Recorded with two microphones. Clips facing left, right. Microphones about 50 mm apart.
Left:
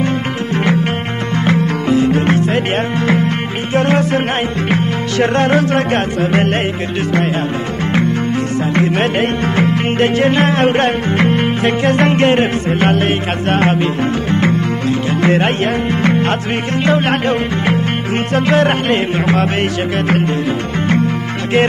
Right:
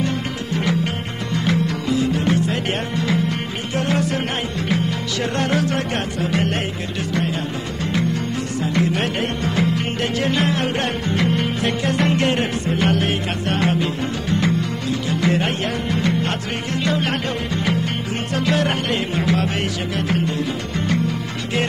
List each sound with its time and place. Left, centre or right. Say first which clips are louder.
1.3 s music: left 5 dB; left
8.6 s music: left 4 dB; left